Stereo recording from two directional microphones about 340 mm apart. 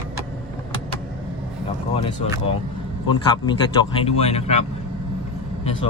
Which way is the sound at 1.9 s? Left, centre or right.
Centre.